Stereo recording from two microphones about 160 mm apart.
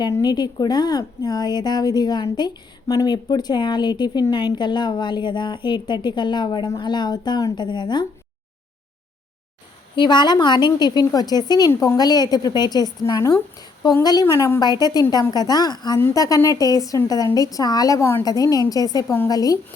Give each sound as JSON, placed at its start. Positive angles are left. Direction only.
{"t": 0.0, "sound": "a woman's voice", "side_deg": 25}
{"t": 9.9, "sound": "a woman's voice", "side_deg": 30}